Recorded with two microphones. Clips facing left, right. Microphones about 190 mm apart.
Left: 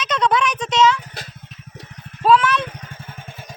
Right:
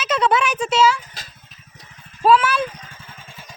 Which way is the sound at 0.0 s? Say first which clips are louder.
Even; 5° right (ahead or behind).